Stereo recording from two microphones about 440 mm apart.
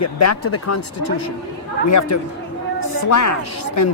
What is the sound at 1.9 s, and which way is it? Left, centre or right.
Speech, left.